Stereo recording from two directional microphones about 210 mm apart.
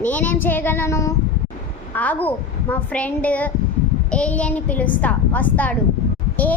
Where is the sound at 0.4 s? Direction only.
10° left (ahead or behind).